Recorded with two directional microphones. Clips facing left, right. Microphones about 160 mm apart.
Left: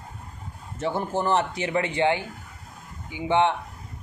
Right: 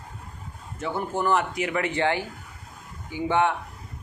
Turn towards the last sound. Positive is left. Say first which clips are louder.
# left 1 dB
turn(degrees=20)  # may be behind; listen again after turning